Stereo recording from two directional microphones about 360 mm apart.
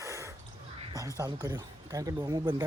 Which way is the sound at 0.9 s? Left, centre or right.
Centre.